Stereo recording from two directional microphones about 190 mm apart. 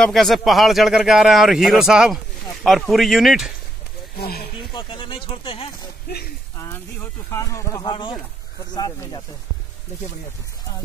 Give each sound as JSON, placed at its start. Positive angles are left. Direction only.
{"t": 0.0, "sound": "speech", "side_deg": 0}
{"t": 4.2, "sound": "speech", "side_deg": 55}
{"t": 4.6, "sound": "speech", "side_deg": 25}
{"t": 6.6, "sound": "speech", "side_deg": 15}